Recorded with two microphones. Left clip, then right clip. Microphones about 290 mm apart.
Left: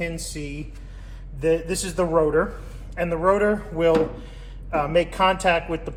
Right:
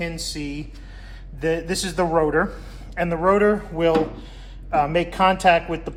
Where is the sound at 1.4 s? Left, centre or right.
Right.